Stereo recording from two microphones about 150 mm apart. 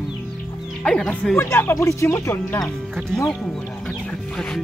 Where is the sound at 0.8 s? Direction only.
5° left (ahead or behind).